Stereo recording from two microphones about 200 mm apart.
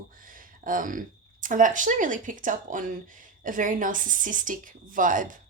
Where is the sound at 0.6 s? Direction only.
40° right (ahead or behind).